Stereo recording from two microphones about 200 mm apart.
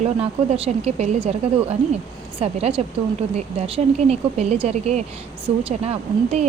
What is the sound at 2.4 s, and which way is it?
Speech, 30° right (ahead or behind).